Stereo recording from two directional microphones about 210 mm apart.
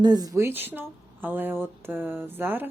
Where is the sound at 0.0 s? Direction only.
20° right (ahead or behind).